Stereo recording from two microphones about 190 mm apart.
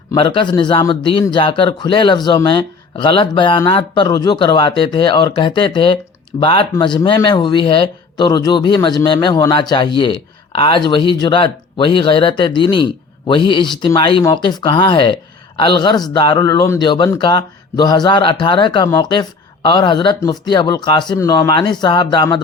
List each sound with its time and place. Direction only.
0.1 s speech: 25° left (ahead or behind)